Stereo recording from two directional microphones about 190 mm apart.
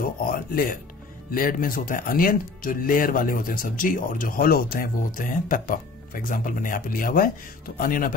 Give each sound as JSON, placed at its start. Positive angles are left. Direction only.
{"t": 0.0, "sound": "speech", "side_deg": 50}